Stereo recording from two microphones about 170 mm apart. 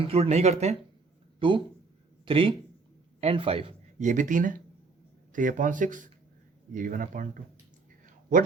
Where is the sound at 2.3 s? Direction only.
30° right (ahead or behind).